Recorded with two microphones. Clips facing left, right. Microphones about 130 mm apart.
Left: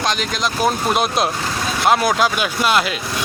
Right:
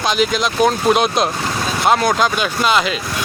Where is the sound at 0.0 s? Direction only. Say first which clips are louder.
Right 4 dB; centre (ahead or behind).